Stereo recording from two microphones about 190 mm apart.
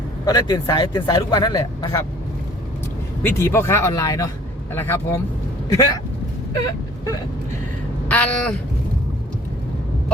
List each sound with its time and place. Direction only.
0.3 s speech: 20° left (ahead or behind)
3.2 s speech: 15° left (ahead or behind)
8.0 s speech: 5° left (ahead or behind)